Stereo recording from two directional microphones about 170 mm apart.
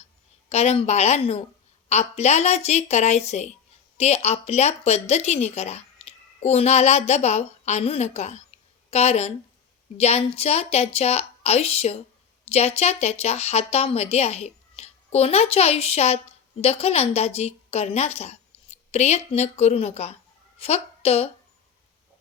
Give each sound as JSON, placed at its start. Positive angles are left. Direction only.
{"t": 0.5, "sound": "a woman's voice", "side_deg": 40}